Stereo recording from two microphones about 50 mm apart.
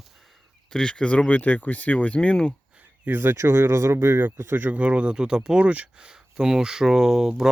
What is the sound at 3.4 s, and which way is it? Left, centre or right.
Speech, right.